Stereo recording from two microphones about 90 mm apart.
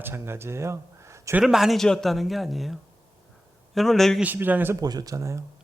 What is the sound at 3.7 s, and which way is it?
Speech, 5° left (ahead or behind).